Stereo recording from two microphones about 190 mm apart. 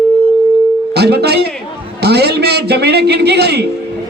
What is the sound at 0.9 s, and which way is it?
A man's voice, 60° right (ahead or behind).